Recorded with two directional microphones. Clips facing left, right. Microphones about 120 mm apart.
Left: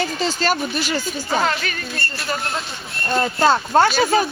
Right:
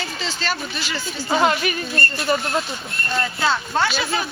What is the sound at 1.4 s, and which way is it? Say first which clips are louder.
Speech: right 5 dB; 15° right (ahead or behind).